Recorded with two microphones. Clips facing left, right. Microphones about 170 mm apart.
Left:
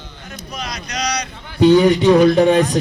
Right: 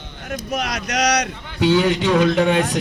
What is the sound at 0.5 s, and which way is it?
Speech, 75° right (ahead or behind).